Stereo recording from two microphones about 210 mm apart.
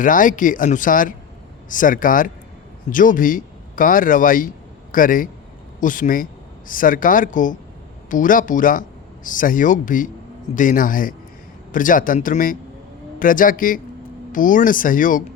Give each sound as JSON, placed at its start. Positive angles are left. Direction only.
{"t": 0.0, "sound": "speech", "side_deg": 40}